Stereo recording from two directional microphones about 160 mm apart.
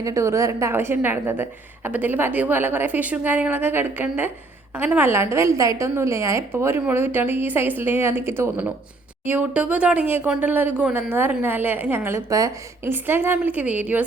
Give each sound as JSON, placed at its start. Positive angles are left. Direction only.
{"t": 0.0, "sound": "a woman's voice", "side_deg": -20}